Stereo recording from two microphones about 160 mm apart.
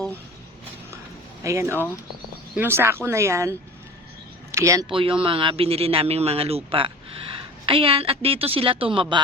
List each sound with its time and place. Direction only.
1.5 s speech: 20° right (ahead or behind)
4.5 s speech: 20° right (ahead or behind)
4.9 s speech: 35° right (ahead or behind)